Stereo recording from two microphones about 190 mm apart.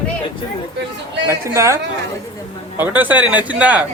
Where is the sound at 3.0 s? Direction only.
10° right (ahead or behind).